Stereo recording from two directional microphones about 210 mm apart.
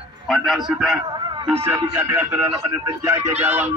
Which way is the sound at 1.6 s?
10° right (ahead or behind).